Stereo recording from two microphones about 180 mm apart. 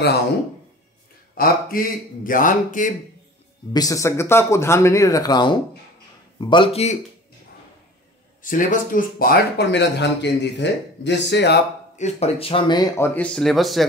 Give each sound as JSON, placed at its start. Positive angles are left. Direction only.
{"t": 1.3, "sound": "a man's voice", "side_deg": 55}
{"t": 3.7, "sound": "a man's voice", "side_deg": 20}
{"t": 8.4, "sound": "speech", "side_deg": 45}
{"t": 12.0, "sound": "speech", "side_deg": 35}